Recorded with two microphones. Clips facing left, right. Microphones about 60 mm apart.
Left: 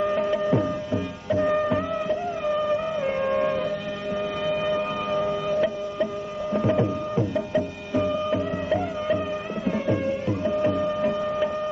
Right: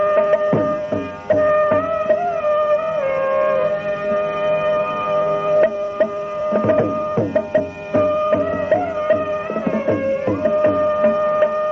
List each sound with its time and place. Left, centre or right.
0.1 s music: right